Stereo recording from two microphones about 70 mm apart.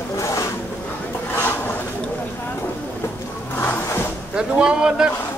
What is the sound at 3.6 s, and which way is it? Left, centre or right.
Drawer open or close, left.